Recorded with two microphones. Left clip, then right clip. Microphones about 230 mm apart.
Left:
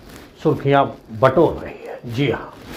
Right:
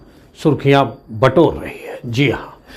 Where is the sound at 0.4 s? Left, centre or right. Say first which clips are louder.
Right 3 dB; right.